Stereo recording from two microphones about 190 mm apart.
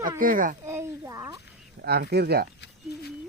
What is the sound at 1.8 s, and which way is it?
Speech, 55° right (ahead or behind).